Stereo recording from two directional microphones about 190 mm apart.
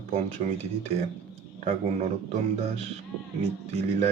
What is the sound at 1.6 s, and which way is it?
Speech, 35° right (ahead or behind).